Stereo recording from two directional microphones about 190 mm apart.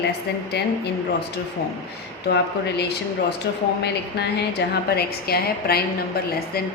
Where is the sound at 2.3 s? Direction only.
60° left (ahead or behind).